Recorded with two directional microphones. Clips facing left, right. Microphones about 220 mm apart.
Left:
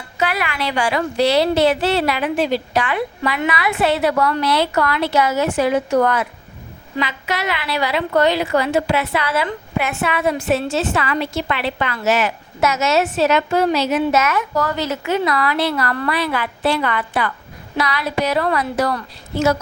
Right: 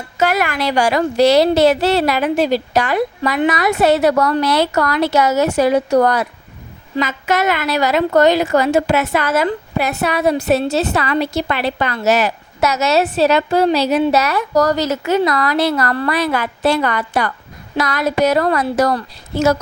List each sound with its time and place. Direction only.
0.2 s a woman's voice: 45° right (ahead or behind)